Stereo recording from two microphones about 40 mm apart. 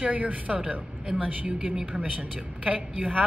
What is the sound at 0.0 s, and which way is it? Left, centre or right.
A woman's voice, right.